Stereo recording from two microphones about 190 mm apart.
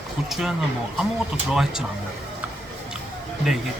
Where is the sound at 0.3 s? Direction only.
Centre (ahead or behind).